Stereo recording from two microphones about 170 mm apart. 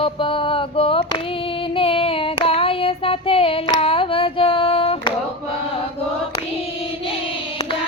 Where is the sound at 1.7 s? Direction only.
35° left (ahead or behind).